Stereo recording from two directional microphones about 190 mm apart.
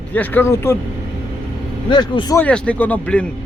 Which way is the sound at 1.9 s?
25° left (ahead or behind).